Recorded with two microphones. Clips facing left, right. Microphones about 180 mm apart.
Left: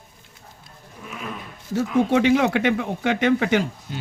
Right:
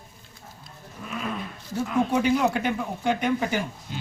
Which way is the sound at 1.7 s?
90° left.